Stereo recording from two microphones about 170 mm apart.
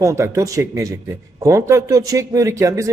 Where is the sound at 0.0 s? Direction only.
15° right (ahead or behind).